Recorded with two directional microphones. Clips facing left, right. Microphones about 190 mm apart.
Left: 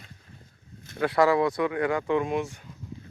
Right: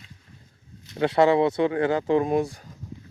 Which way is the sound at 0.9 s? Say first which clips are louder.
Right 3 dB; 25° right (ahead or behind).